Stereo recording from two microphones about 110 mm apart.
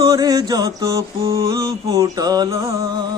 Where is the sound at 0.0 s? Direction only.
35° right (ahead or behind).